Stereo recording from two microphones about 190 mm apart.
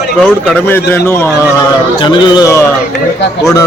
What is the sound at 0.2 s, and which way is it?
Speech, 5° left (ahead or behind).